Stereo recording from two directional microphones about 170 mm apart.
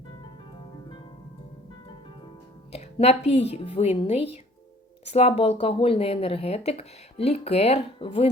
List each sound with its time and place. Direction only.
2.7 s speech: 40° left (ahead or behind)